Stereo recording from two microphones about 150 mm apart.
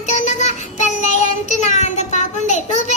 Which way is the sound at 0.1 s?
50° left (ahead or behind).